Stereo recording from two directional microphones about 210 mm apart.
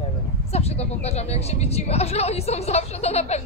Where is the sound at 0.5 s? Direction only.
30° left (ahead or behind).